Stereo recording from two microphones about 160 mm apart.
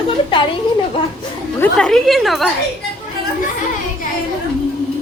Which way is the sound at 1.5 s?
10° left (ahead or behind).